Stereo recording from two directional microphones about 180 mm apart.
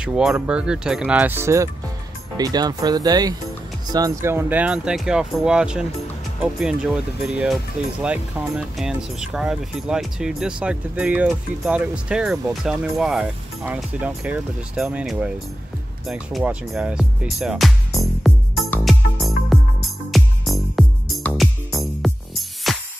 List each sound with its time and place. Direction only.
0.0 s speech: 5° right (ahead or behind)
16.1 s music: centre (ahead or behind)